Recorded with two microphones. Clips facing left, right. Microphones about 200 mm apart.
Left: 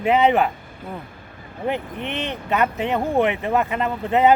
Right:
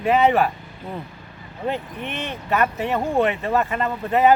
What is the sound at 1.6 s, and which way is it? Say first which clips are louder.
Speech: left 1 dB; 20° left (ahead or behind).